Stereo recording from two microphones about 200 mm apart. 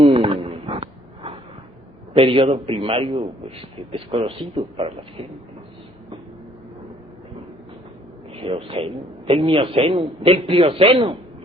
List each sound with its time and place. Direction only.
0.0 s a sound: 25° right (ahead or behind)
2.1 s a man's voice: 25° right (ahead or behind)
8.3 s a man's voice: 30° right (ahead or behind)